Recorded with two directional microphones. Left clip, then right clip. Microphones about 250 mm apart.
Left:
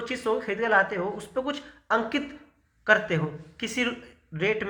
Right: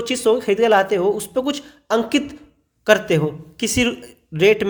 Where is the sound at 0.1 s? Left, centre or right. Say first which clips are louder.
Right 11 dB; right.